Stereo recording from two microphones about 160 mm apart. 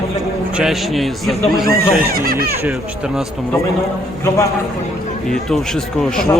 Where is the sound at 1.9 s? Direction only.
70° right (ahead or behind).